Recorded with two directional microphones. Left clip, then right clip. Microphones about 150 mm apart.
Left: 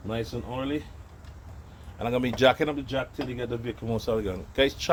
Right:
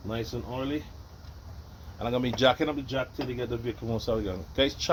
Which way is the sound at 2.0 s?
35° left (ahead or behind).